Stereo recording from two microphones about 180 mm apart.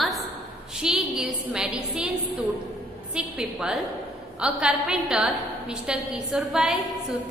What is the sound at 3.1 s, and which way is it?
A woman's voice, 5° right (ahead or behind).